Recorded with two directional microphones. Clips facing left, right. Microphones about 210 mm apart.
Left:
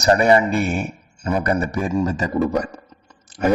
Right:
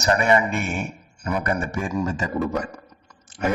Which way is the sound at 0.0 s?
35° left (ahead or behind).